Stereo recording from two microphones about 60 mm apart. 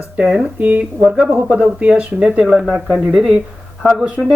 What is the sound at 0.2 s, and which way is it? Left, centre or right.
Speech, centre.